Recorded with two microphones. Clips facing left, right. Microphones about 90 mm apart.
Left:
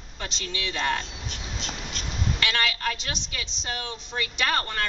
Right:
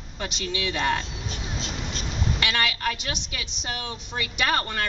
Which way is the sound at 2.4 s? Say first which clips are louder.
Right 1 dB; 15° right (ahead or behind).